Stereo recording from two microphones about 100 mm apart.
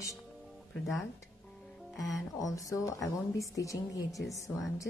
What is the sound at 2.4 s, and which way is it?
A woman's voice, 35° left (ahead or behind).